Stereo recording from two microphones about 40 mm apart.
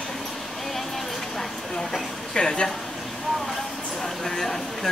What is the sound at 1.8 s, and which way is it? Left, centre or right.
Speech, centre.